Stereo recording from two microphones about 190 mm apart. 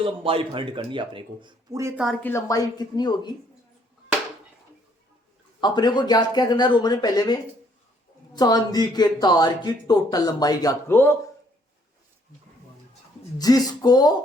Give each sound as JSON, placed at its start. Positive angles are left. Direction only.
{"t": 0.0, "sound": "speech", "side_deg": -30}
{"t": 2.2, "sound": "speech", "side_deg": 15}
{"t": 5.5, "sound": "speech", "side_deg": 25}
{"t": 8.4, "sound": "speech", "side_deg": 20}
{"t": 13.4, "sound": "speech", "side_deg": 20}